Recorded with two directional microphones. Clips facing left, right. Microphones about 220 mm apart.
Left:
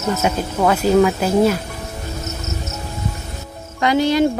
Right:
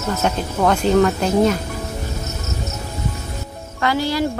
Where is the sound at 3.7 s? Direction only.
20° left (ahead or behind).